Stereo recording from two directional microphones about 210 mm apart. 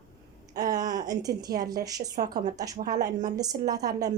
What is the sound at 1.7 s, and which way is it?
A woman's voice, 15° right (ahead or behind).